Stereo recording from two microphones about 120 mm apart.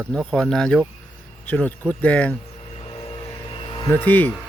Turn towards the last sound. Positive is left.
turn(degrees=15)  # may be behind; listen again after turning